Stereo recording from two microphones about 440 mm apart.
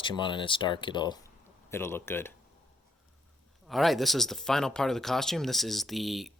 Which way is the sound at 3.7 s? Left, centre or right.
Centre.